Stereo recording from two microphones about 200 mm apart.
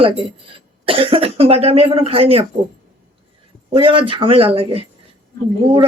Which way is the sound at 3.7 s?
25° right (ahead or behind).